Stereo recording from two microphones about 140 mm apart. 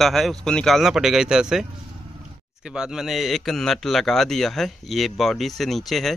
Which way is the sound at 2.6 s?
5° right (ahead or behind).